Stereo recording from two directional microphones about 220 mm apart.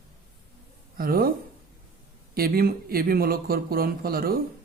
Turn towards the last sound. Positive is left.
turn(degrees=-40)  # may be behind; listen again after turning